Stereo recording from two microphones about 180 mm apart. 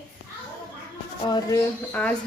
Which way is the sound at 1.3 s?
25° left (ahead or behind).